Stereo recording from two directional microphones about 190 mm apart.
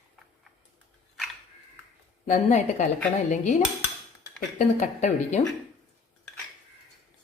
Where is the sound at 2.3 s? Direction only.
40° left (ahead or behind).